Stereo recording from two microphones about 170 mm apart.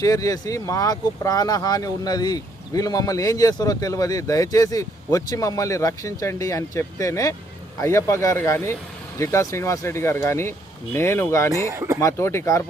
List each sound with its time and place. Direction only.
0.0 s speech: 20° left (ahead or behind)
11.7 s speech: 15° right (ahead or behind)
11.9 s speech: 15° left (ahead or behind)